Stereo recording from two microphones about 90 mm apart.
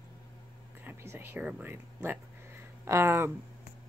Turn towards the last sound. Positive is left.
turn(degrees=-30)  # may be behind; listen again after turning